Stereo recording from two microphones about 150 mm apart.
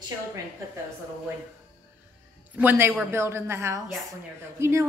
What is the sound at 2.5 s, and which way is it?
A woman's voice, 15° right (ahead or behind).